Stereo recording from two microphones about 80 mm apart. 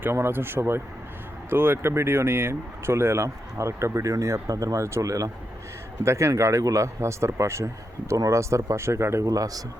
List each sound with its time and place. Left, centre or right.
0.0 s speech: right
9.3 s speech: right